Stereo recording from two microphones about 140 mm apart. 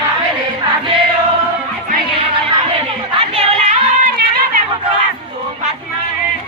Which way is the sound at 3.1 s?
40° right (ahead or behind).